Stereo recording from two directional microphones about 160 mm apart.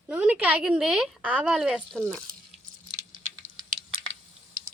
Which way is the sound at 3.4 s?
45° right (ahead or behind).